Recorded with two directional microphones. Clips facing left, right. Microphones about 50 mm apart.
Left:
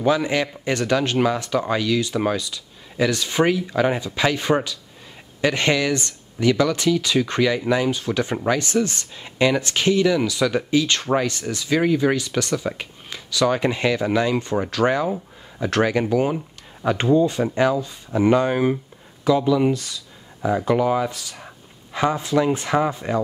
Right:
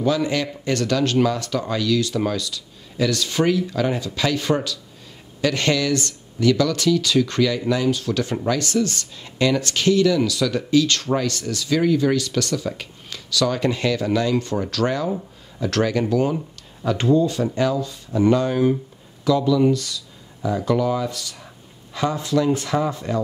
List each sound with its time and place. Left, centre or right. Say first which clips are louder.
0.0 s speech: left 1 dB; left